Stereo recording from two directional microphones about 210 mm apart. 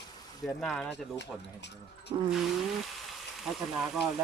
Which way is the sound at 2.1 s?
20° right (ahead or behind).